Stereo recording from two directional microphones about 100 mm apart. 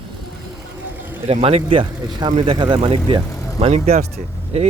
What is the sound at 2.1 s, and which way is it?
Speech, 50° right (ahead or behind).